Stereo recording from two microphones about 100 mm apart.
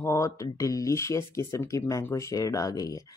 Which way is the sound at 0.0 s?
30° left (ahead or behind).